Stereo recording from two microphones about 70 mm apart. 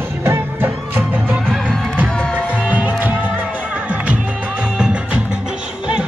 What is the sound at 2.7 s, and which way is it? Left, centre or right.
Music, right.